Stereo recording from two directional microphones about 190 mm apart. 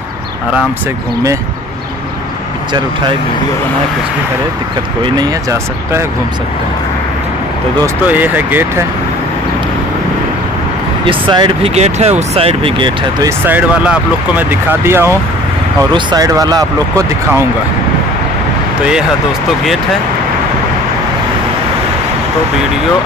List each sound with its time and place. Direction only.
5.0 s speech: 20° right (ahead or behind)
7.8 s speech: 10° right (ahead or behind)
11.1 s speech: 25° right (ahead or behind)
13.5 s speech: 10° right (ahead or behind)
15.9 s speech: 20° right (ahead or behind)